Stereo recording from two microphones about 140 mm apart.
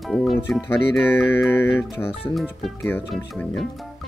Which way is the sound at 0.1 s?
Centre (ahead or behind).